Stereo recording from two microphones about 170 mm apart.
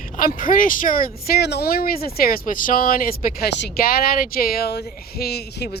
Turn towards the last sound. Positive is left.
turn(degrees=70)  # may be behind; listen again after turning